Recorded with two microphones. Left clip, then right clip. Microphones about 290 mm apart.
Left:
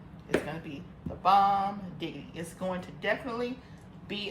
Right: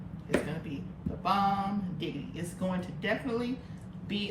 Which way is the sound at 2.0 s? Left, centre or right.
Centre.